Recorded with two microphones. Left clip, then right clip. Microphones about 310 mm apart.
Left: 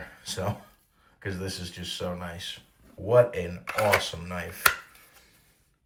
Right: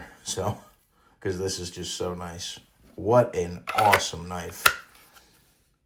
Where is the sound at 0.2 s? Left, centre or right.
Centre.